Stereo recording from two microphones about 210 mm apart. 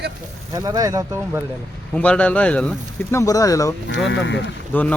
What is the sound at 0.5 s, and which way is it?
Speech, 20° right (ahead or behind).